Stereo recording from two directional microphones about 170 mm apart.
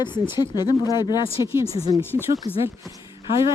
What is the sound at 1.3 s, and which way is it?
Speech, 15° right (ahead or behind).